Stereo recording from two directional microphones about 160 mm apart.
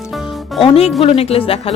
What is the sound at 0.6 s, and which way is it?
Speech, 40° left (ahead or behind).